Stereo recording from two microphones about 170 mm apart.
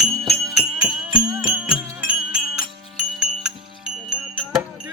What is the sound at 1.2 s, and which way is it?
Music, 20° right (ahead or behind).